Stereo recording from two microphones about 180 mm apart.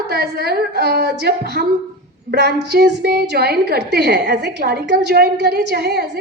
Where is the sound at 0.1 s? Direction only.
60° right (ahead or behind).